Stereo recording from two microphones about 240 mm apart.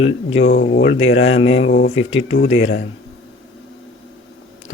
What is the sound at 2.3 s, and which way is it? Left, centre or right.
Speech, left.